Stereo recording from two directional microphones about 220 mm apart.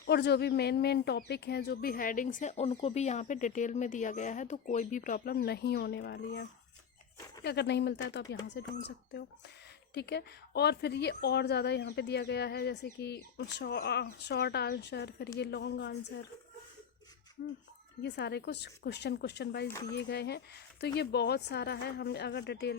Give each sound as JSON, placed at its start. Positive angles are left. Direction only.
{"t": 0.0, "sound": "speech", "side_deg": 50}
{"t": 17.4, "sound": "speech", "side_deg": 50}
{"t": 19.6, "sound": "speech", "side_deg": 10}
{"t": 19.9, "sound": "speech", "side_deg": 50}